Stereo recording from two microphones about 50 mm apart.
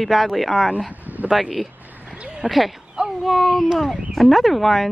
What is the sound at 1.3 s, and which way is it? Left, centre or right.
Speech, centre.